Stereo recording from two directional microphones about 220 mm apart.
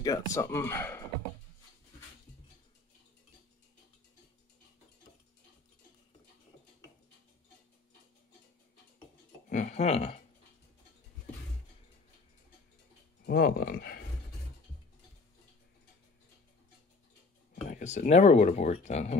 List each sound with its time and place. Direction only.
0.0 s speech: 15° left (ahead or behind)
9.5 s a sound: 35° left (ahead or behind)
13.2 s speech: 45° left (ahead or behind)
17.6 s speech: 35° left (ahead or behind)